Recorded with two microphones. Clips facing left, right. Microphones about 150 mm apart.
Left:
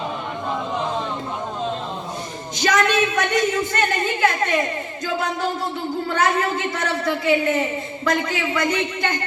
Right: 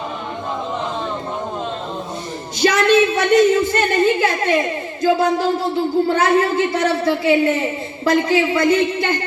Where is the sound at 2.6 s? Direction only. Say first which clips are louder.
Right 5 dB; 30° right (ahead or behind).